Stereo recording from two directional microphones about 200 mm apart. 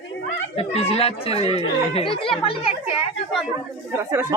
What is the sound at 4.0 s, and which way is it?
Speech, 15° right (ahead or behind).